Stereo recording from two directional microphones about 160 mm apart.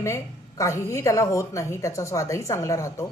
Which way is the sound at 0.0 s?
20° left (ahead or behind).